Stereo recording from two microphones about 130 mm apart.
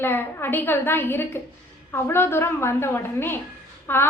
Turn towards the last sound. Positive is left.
turn(degrees=15)  # may be behind; listen again after turning